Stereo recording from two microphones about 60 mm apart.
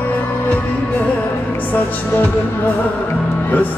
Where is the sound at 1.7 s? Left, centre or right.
Left.